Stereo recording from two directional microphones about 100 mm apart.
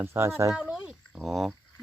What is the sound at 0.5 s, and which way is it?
Speech, 5° right (ahead or behind).